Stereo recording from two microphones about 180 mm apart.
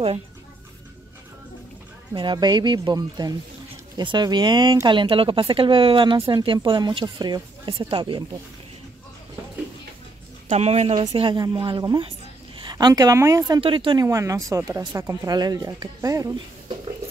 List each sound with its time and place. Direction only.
2.1 s speech: 25° right (ahead or behind)
10.5 s speech: 35° right (ahead or behind)
11.1 s speech: 25° right (ahead or behind)